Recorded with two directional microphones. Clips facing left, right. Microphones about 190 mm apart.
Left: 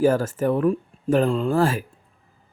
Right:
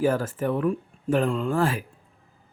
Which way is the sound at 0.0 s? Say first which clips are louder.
Left 4 dB; 40° left (ahead or behind).